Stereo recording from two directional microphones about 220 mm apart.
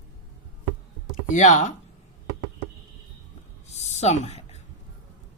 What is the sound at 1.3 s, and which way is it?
Speech, 30° left (ahead or behind).